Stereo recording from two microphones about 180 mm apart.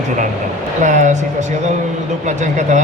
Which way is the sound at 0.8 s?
40° right (ahead or behind).